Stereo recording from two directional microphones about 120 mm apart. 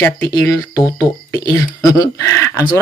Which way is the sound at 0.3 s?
25° left (ahead or behind).